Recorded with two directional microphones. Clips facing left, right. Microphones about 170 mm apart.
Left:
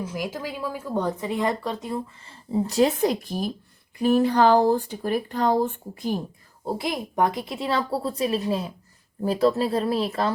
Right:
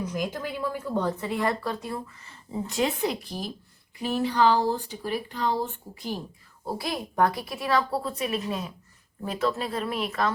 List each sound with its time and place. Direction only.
0.0 s a woman's voice: 5° left (ahead or behind); by 6.1 s 50° left (ahead or behind)
6.7 s a woman's voice: 20° left (ahead or behind)